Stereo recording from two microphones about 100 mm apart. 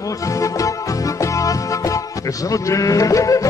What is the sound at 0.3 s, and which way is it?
Music, 35° left (ahead or behind).